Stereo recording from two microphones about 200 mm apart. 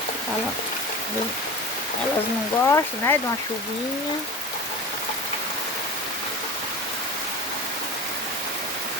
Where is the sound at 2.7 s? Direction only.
15° left (ahead or behind).